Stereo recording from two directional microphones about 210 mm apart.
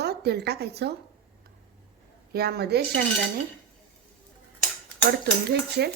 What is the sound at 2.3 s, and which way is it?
Speech, 50° right (ahead or behind).